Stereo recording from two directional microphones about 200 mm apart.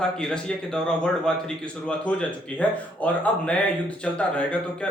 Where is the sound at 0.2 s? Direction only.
5° left (ahead or behind).